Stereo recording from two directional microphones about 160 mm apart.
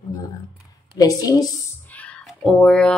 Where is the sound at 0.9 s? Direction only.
25° left (ahead or behind).